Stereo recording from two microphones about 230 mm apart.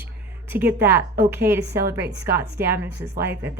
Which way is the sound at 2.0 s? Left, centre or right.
Right.